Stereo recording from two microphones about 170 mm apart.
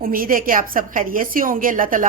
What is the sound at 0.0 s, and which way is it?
A woman's voice, 55° right (ahead or behind).